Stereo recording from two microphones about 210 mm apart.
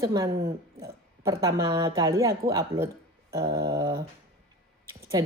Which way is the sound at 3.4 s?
20° right (ahead or behind).